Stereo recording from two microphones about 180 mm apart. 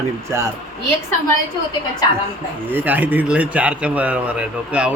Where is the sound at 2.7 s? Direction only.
10° right (ahead or behind).